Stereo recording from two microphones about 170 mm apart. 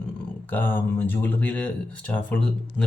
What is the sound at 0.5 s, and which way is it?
Speech, 10° left (ahead or behind).